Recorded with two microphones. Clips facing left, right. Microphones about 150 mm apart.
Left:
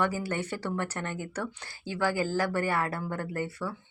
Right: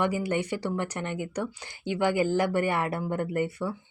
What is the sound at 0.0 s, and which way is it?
A woman's voice, 15° right (ahead or behind).